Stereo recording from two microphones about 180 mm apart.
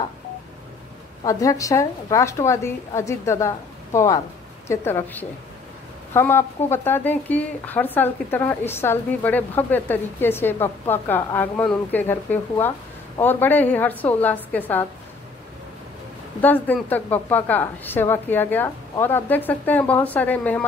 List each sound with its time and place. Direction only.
1.2 s speech: 20° left (ahead or behind)
16.3 s speech: 10° left (ahead or behind)